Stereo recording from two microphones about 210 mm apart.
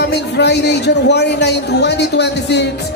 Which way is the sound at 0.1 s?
50° left (ahead or behind).